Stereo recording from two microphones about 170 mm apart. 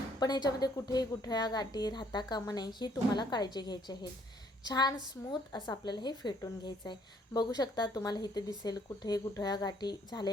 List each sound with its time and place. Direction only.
0.2 s a woman's voice: 25° left (ahead or behind)